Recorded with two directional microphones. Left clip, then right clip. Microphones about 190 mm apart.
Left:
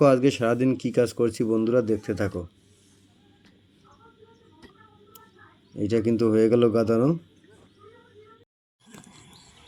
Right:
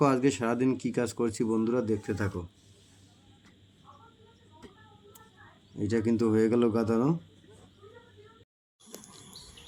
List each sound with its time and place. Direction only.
0.0 s speech: 15° left (ahead or behind)
5.8 s speech: 15° left (ahead or behind)